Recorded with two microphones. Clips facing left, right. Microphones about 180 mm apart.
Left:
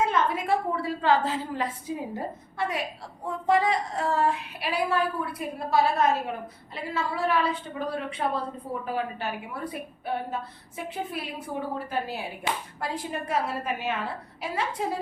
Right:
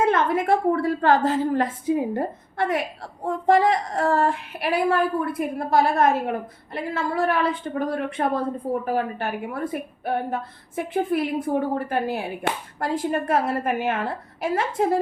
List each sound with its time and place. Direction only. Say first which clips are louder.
0.0 s speech: right 5 dB; 55° right (ahead or behind)